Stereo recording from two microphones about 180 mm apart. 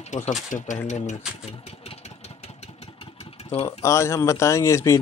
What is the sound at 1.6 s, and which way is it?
Vehicle, 35° left (ahead or behind).